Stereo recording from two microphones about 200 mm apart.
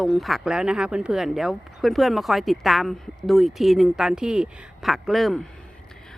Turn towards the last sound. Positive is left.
turn(degrees=0)  # may be behind; listen again after turning